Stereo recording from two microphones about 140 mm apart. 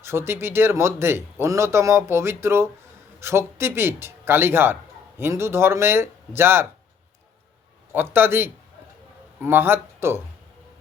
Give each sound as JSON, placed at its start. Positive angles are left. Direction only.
{"t": 0.0, "sound": "a man's voice", "side_deg": -20}
{"t": 7.9, "sound": "a man's voice", "side_deg": -15}